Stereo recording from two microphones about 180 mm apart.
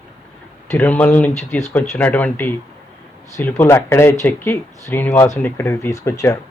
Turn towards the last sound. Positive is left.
turn(degrees=15)  # may be behind; listen again after turning